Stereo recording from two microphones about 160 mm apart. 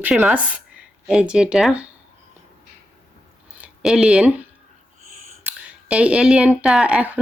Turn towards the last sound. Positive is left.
turn(degrees=-10)  # may be behind; listen again after turning